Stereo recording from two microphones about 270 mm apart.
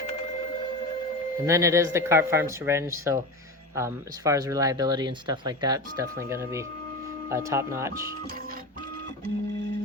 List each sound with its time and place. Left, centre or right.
1.5 s speech: centre